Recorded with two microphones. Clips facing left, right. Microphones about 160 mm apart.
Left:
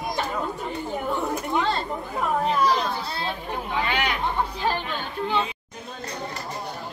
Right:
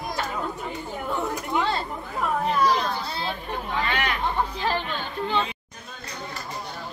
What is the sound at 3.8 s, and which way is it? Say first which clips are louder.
Chatter: left 1 dB; 10° left (ahead or behind).